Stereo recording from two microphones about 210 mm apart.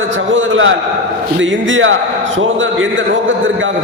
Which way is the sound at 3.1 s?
65° right (ahead or behind).